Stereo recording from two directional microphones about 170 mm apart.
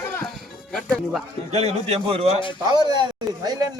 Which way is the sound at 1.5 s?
40° right (ahead or behind).